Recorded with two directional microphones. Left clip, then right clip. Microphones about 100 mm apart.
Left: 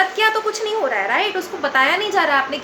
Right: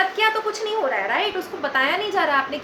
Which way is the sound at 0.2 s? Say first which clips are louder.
Left 3 dB; 40° left (ahead or behind).